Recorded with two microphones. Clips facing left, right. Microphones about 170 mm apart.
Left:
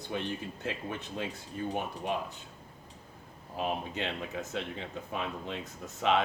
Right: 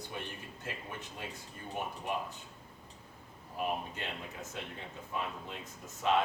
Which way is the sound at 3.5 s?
90° left.